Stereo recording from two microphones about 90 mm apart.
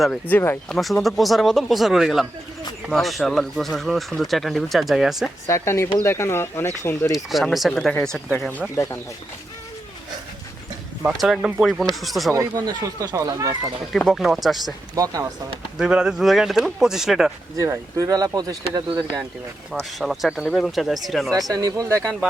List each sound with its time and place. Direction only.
0.3 s speech: 20° left (ahead or behind)
0.7 s speech: centre (ahead or behind)
5.5 s speech: 30° left (ahead or behind)
7.1 s speech: centre (ahead or behind)
8.7 s speech: 35° left (ahead or behind)
11.2 s speech: 5° right (ahead or behind)
12.5 s speech: 45° right (ahead or behind)
13.9 s speech: centre (ahead or behind)
14.9 s speech: 40° right (ahead or behind)
15.8 s speech: 10° right (ahead or behind)
17.6 s speech: 40° right (ahead or behind)
19.8 s speech: centre (ahead or behind)
21.5 s speech: 40° right (ahead or behind)